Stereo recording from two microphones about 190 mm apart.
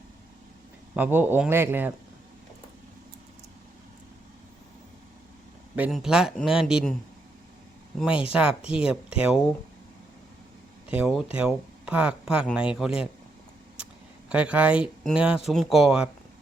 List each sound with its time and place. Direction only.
0.9 s speech: 10° right (ahead or behind)
5.7 s speech: 5° right (ahead or behind)
8.3 s speech: 5° right (ahead or behind)
10.8 s speech: 5° right (ahead or behind)
14.3 s speech: 5° right (ahead or behind)